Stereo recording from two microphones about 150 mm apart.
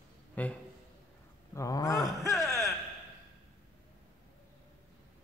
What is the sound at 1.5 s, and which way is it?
Groan, 20° left (ahead or behind).